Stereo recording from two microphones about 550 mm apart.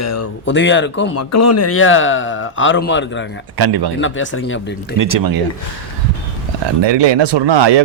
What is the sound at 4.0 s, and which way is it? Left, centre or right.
Speech, left.